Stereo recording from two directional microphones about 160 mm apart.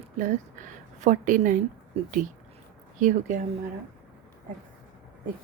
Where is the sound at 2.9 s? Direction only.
50° right (ahead or behind).